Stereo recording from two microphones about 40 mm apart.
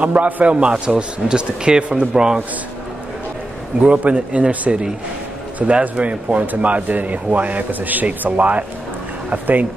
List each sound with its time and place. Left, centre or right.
0.0 s speech: right
0.8 s speech: right
3.8 s speech: right